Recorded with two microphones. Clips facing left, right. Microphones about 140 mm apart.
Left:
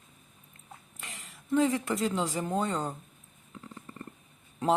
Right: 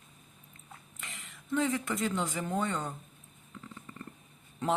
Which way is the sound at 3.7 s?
30° left (ahead or behind).